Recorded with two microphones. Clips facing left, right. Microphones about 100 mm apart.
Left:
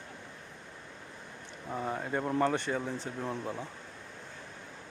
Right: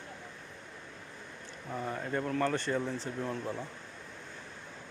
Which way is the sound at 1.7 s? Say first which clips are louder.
Left 1 dB; 20° left (ahead or behind).